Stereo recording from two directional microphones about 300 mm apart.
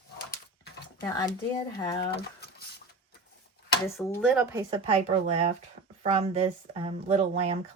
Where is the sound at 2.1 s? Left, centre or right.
Left.